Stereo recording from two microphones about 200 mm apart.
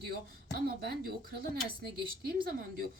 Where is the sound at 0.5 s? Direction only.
50° right (ahead or behind).